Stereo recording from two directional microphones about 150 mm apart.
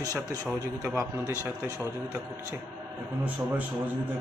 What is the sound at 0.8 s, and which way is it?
A man's voice, 10° right (ahead or behind).